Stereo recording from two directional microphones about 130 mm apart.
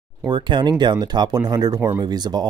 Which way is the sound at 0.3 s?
35° right (ahead or behind).